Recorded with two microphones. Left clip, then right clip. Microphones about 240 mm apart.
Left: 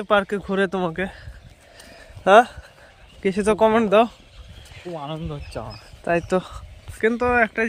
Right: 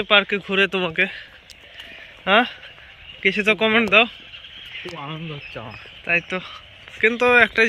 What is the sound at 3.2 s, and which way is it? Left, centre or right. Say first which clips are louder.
Speech: even; centre.